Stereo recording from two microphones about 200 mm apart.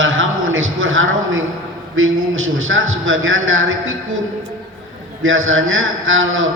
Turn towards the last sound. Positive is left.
turn(degrees=-75)  # may be behind; listen again after turning